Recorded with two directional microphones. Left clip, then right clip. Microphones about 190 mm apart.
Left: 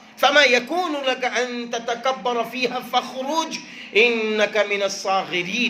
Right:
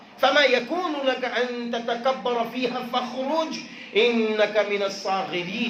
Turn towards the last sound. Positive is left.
turn(degrees=45)  # may be behind; listen again after turning